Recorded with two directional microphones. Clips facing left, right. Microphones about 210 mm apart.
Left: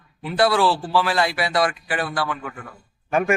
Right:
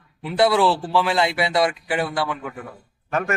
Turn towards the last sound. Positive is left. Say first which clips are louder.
# left 4 dB
turn(degrees=10)  # may be behind; listen again after turning